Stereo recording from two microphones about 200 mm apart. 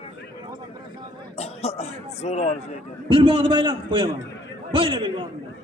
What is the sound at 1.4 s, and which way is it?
Cough, 30° left (ahead or behind).